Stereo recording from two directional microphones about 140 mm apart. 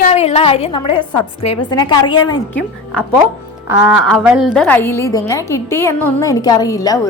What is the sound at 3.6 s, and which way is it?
Speech, 10° right (ahead or behind).